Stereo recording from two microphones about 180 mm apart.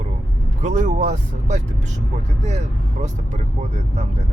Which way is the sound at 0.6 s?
40° right (ahead or behind).